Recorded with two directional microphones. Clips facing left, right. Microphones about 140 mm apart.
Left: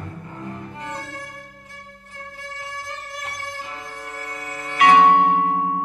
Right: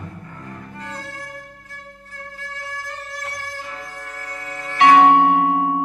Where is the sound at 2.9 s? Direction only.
20° left (ahead or behind).